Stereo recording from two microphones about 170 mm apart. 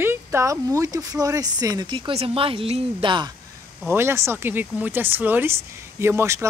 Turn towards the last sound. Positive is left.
turn(degrees=-15)  # may be behind; listen again after turning